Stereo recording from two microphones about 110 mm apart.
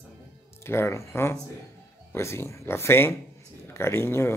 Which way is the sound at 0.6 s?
25° left (ahead or behind).